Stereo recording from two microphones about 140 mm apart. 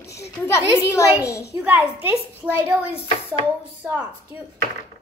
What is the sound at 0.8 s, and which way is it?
Speech, 20° left (ahead or behind).